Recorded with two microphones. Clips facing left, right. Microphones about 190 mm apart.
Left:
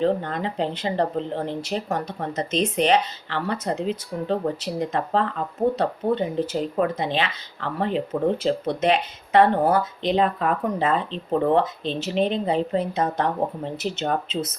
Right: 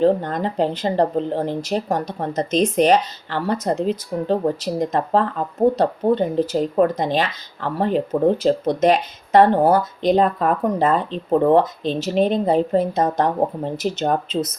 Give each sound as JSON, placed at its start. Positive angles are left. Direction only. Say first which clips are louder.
{"t": 0.0, "sound": "speech", "louder": "right 5 dB", "side_deg": -40}